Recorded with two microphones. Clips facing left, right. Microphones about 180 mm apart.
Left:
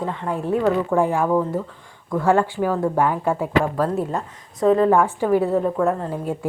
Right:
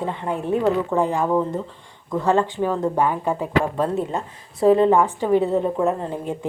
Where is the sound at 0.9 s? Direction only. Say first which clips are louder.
Left 2 dB; 10° left (ahead or behind).